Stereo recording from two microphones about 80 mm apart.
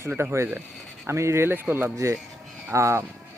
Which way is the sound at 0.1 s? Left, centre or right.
Right.